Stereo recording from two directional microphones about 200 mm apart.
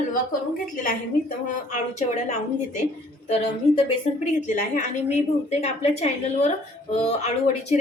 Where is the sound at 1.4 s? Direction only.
40° left (ahead or behind).